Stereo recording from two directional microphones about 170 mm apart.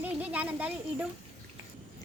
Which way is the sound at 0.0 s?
10° right (ahead or behind).